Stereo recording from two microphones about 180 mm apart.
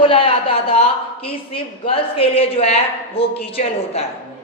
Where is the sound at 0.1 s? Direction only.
30° left (ahead or behind).